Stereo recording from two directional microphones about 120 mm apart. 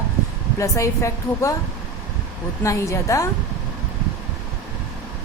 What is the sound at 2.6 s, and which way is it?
Speech, 25° left (ahead or behind).